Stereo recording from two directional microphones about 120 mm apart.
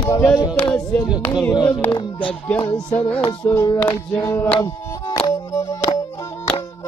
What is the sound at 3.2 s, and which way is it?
Music, 40° left (ahead or behind).